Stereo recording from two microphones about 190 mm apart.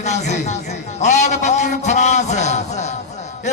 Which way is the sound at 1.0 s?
40° left (ahead or behind).